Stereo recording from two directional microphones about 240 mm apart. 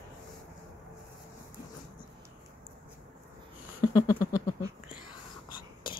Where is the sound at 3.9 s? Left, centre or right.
Centre.